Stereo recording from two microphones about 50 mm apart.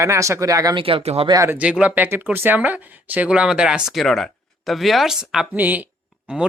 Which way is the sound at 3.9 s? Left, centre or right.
Centre.